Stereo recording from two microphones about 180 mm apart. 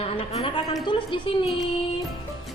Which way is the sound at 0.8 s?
25° left (ahead or behind).